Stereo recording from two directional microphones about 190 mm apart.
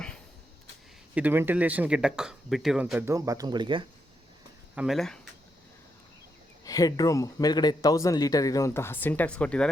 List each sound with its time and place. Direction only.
1.1 s speech: 10° right (ahead or behind)
3.2 s speech: 20° right (ahead or behind)
4.7 s speech: 5° right (ahead or behind)
6.7 s speech: 20° left (ahead or behind)